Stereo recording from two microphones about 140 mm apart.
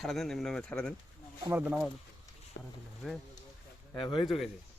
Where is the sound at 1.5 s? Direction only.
15° right (ahead or behind).